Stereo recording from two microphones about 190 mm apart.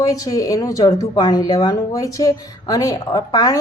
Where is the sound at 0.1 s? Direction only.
15° left (ahead or behind).